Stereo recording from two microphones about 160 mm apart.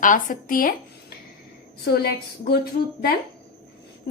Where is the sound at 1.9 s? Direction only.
80° left.